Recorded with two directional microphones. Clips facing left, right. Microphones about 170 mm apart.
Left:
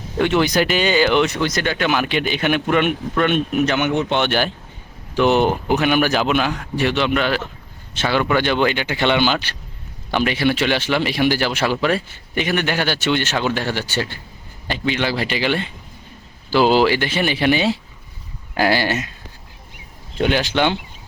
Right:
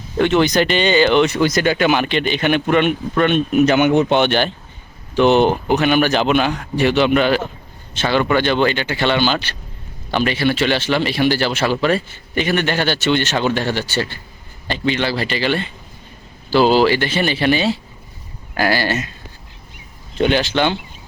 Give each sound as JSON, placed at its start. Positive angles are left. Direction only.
{"t": 0.2, "sound": "a man's voice", "side_deg": 10}
{"t": 1.4, "sound": "speech", "side_deg": -10}
{"t": 2.0, "sound": "a man's voice", "side_deg": 5}
{"t": 3.7, "sound": "speech", "side_deg": -10}
{"t": 4.1, "sound": "a man's voice", "side_deg": 0}
{"t": 20.1, "sound": "speech", "side_deg": 10}